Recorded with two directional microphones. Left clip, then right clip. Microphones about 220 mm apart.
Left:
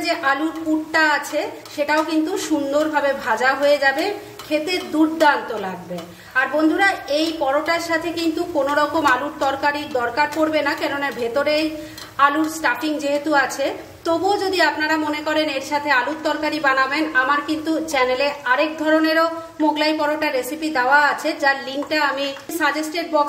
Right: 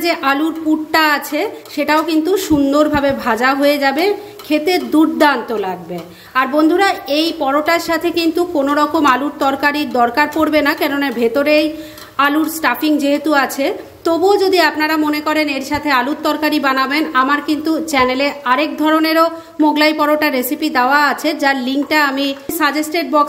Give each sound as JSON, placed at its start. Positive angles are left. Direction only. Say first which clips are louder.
{"t": 0.0, "sound": "a woman's voice", "louder": "right 4 dB", "side_deg": -35}